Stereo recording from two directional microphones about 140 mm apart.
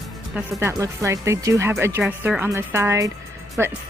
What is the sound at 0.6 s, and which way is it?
Speech, 20° right (ahead or behind).